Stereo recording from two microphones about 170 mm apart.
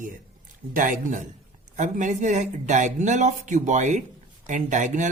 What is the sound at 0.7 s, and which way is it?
Speech, 50° right (ahead or behind).